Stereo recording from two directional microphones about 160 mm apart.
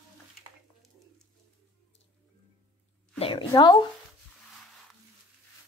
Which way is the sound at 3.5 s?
25° left (ahead or behind).